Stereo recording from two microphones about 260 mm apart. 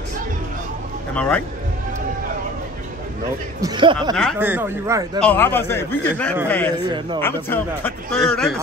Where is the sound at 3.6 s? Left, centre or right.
Centre.